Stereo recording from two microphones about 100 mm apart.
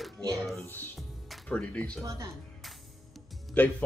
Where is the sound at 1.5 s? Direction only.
15° left (ahead or behind).